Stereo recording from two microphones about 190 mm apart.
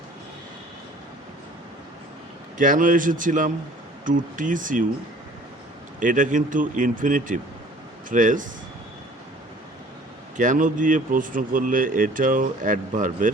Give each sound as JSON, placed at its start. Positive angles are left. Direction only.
{"t": 2.6, "sound": "speech", "side_deg": -45}
{"t": 6.0, "sound": "speech", "side_deg": -45}
{"t": 10.3, "sound": "speech", "side_deg": -40}